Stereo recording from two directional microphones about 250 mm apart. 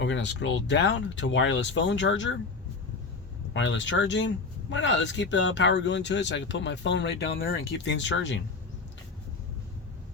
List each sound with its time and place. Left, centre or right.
0.0 s speech: left
3.5 s speech: left